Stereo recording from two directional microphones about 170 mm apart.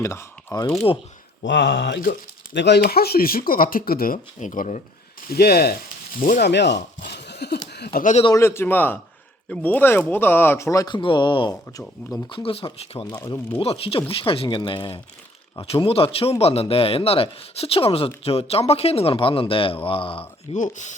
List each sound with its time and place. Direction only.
0.0 s speech: 15° left (ahead or behind)
1.5 s speech: 90° left; by 4.8 s 45° left (ahead or behind)
5.3 s speech: 65° left (ahead or behind)
6.1 s speech: 50° left (ahead or behind)
6.4 s a sound: 85° left
8.3 s speech: 15° left (ahead or behind)
11.8 s speech: 5° left (ahead or behind)
12.3 s speech: 35° left (ahead or behind)
13.1 s speech: 20° left (ahead or behind)
13.6 s speech: 35° left (ahead or behind)
20.6 s speech: 45° left (ahead or behind)